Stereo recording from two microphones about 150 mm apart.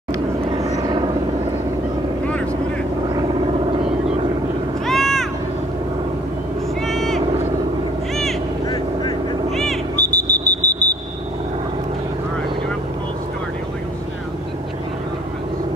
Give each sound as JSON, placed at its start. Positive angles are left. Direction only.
{"t": 0.5, "sound": "vehicle", "side_deg": -25}
{"t": 4.8, "sound": "a sound", "side_deg": 0}
{"t": 6.9, "sound": "vehicle", "side_deg": 0}
{"t": 8.6, "sound": "vehicle", "side_deg": 30}
{"t": 9.5, "sound": "smoke detector", "side_deg": 0}